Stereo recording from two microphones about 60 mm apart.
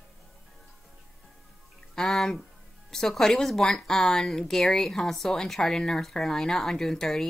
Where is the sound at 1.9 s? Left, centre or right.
Centre.